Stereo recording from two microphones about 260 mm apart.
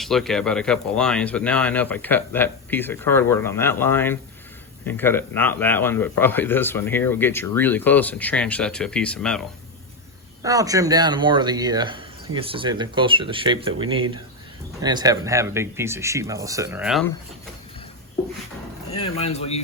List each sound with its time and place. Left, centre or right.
0.0 s speech: centre
10.4 s speech: centre
19.0 s speech: left